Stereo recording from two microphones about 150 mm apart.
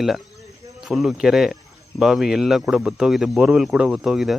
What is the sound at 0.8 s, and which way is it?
Speech, centre (ahead or behind).